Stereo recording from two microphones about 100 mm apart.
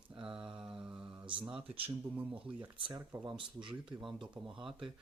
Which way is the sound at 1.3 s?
55° right (ahead or behind).